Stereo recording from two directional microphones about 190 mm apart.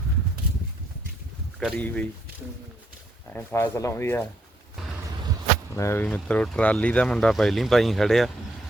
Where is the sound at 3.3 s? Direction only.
15° left (ahead or behind).